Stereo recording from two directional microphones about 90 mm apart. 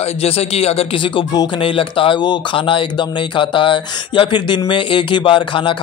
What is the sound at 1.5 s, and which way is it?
Speech, 80° left.